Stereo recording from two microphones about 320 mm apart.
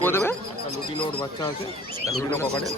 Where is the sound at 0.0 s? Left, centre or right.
Centre.